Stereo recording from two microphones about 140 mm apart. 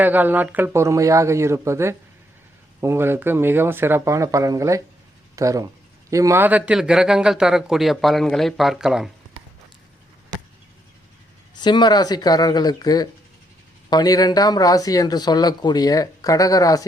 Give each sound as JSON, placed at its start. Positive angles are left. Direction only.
{"t": 0.0, "sound": "speech", "side_deg": -10}
{"t": 11.6, "sound": "speech", "side_deg": 30}